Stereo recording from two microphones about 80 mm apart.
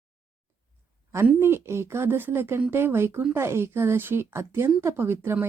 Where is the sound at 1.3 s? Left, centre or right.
Right.